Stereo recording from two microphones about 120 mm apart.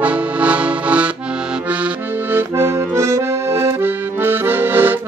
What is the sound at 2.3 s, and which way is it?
Accordion, 20° right (ahead or behind).